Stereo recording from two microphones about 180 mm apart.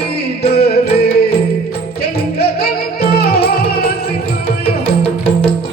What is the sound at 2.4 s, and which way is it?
Music, 60° left (ahead or behind).